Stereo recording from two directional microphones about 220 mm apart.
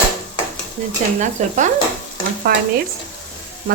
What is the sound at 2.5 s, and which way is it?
Frying, 45° right (ahead or behind).